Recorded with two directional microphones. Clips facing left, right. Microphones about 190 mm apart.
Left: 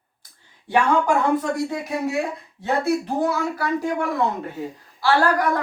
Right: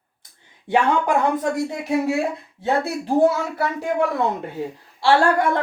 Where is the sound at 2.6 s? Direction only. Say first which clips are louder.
Left 1 dB; 25° right (ahead or behind).